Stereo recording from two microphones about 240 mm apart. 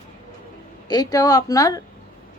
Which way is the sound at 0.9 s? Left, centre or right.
Centre.